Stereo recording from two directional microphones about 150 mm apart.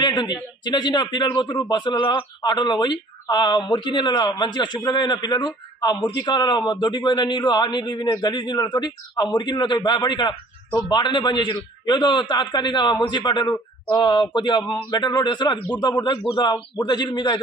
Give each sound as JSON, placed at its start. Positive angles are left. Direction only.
{"t": 0.0, "sound": "a man's voice", "side_deg": 30}
{"t": 16.7, "sound": "a man's voice", "side_deg": 30}